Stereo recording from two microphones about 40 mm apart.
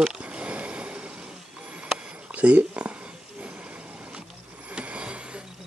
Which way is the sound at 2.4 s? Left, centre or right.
Right.